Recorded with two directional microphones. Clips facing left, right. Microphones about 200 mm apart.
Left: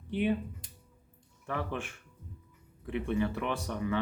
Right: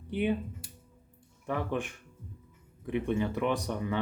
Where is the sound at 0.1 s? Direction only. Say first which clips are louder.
Even; 15° right (ahead or behind).